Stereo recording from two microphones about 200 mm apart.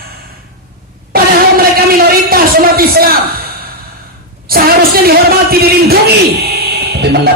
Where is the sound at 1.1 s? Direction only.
50° right (ahead or behind).